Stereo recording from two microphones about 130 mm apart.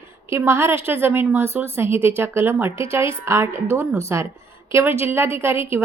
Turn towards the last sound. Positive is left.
turn(degrees=-20)  # may be behind; listen again after turning